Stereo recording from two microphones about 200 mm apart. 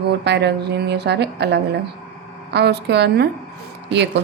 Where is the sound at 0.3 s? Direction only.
55° right (ahead or behind).